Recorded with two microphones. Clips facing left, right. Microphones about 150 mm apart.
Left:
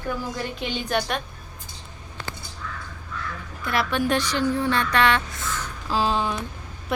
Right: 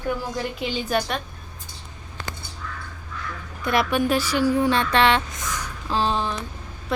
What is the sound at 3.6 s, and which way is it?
Speech, 20° right (ahead or behind).